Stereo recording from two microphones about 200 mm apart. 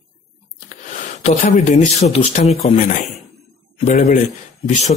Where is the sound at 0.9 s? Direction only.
35° left (ahead or behind).